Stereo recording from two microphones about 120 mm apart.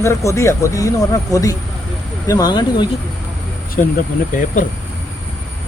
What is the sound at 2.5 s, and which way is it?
Speech, 40° left (ahead or behind).